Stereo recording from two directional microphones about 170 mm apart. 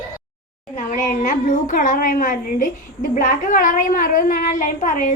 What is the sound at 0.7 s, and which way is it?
A woman's voice, 50° left (ahead or behind).